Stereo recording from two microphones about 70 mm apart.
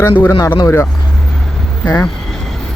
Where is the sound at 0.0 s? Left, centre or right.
Left.